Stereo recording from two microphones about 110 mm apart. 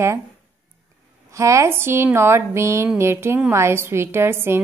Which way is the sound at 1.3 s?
30° right (ahead or behind).